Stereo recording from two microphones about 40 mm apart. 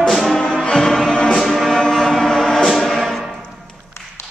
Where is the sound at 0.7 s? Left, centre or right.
Centre.